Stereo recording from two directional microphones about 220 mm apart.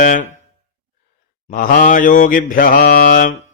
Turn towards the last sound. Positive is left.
turn(degrees=40)  # may be behind; listen again after turning